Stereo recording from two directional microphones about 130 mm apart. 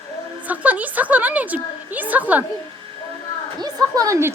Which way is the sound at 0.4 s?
10° right (ahead or behind).